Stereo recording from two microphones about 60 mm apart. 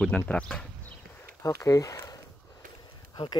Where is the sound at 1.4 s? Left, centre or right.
Left.